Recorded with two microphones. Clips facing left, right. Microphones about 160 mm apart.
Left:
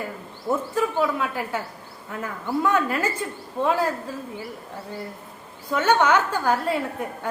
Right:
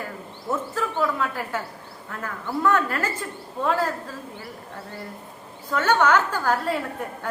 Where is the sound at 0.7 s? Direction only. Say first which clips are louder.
Left 2 dB; 10° left (ahead or behind).